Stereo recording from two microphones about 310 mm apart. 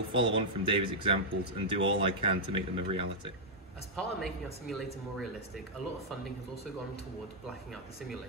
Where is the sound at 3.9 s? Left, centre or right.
Centre.